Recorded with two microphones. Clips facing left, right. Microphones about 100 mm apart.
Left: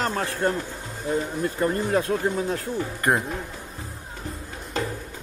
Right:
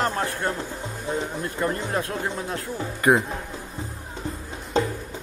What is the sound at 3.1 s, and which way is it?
Speech, 5° right (ahead or behind).